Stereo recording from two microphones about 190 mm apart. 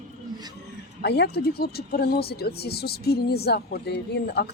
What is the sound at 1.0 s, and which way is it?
Speech, 60° left (ahead or behind).